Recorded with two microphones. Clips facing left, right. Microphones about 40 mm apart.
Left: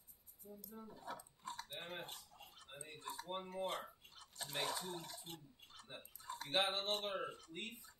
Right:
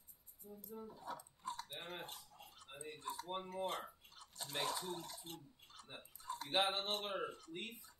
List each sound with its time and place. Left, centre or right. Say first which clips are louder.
0.7 s speech: right 2 dB; centre
1.8 s a sound: even; centre
2.9 s speech: right 2 dB; centre